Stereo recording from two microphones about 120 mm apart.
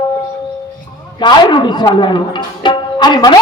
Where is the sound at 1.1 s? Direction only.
40° left (ahead or behind).